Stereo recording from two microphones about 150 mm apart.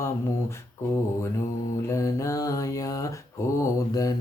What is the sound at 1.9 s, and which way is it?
Mantra, 20° left (ahead or behind).